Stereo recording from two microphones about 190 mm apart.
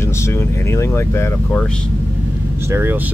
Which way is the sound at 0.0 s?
15° left (ahead or behind).